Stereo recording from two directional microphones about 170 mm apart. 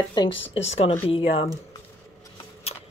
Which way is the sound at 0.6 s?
40° left (ahead or behind).